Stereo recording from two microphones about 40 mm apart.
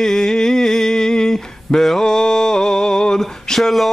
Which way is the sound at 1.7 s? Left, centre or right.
Centre.